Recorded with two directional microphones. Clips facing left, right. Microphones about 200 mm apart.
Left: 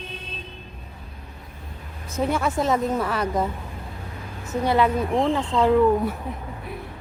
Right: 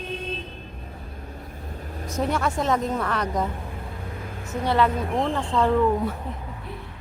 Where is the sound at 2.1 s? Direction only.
5° left (ahead or behind).